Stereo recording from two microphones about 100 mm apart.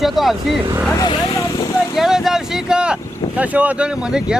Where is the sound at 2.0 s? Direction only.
5° right (ahead or behind).